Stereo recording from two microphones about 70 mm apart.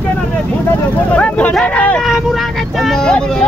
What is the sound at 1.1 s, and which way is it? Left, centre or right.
Speech, centre.